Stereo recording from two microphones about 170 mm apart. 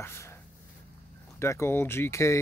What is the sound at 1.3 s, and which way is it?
Speech, 15° left (ahead or behind).